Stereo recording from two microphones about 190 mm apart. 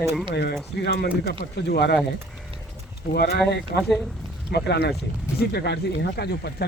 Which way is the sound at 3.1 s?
60° left (ahead or behind).